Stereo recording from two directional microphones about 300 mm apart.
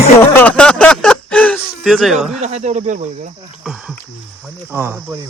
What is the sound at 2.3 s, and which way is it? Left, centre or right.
Speech, right.